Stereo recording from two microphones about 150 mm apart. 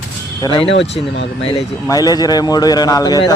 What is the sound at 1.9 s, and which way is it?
Speech, 25° left (ahead or behind).